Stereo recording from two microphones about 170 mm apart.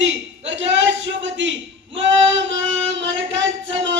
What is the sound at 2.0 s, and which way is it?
Child singing, 90° right.